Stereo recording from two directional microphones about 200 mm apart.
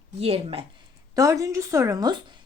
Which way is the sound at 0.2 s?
30° right (ahead or behind).